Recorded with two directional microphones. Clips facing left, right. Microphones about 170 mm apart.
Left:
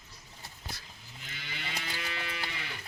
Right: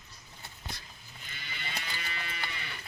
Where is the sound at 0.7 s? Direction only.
5° left (ahead or behind).